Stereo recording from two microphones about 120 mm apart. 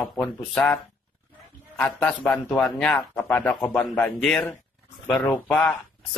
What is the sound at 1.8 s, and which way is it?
Speech, 10° left (ahead or behind).